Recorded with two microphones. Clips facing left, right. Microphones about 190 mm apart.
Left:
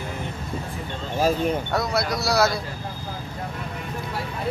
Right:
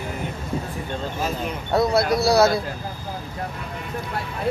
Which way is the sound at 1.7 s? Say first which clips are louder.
Right 5 dB; 30° right (ahead or behind).